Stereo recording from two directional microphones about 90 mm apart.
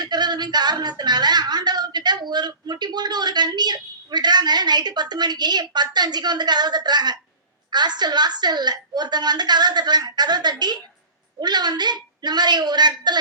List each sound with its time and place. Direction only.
0.0 s a woman's voice: 55° right (ahead or behind)